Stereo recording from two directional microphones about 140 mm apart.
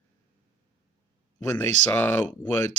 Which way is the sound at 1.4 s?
15° left (ahead or behind).